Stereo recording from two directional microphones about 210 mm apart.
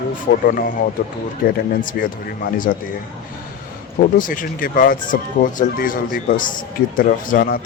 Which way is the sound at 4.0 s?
40° left (ahead or behind).